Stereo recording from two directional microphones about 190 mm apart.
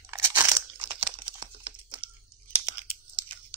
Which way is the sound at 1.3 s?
25° right (ahead or behind).